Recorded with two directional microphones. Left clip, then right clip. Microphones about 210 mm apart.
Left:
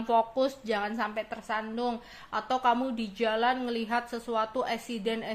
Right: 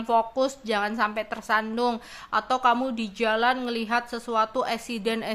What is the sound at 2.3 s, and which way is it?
Speech, 20° right (ahead or behind).